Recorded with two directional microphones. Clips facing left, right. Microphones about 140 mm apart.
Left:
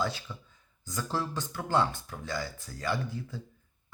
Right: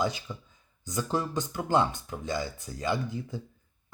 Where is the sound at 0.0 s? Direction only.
15° right (ahead or behind).